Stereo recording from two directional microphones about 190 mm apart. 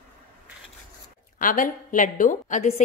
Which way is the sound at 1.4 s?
45° left (ahead or behind).